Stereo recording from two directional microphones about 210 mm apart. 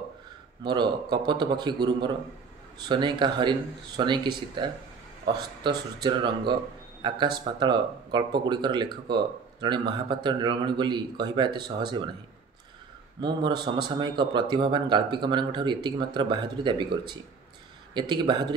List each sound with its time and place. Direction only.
0.7 s a man's voice: 20° right (ahead or behind)
13.2 s speech: 20° right (ahead or behind)